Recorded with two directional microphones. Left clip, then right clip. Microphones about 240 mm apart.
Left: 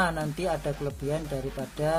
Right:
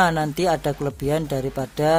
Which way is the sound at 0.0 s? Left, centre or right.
Right.